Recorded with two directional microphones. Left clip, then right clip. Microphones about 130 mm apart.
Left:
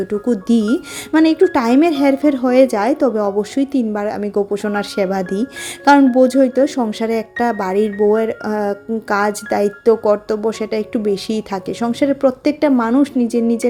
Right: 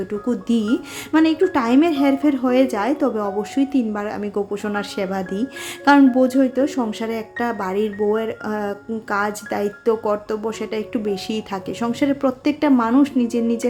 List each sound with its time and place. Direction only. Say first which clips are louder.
0.1 s speech: left 5 dB; 40° left (ahead or behind)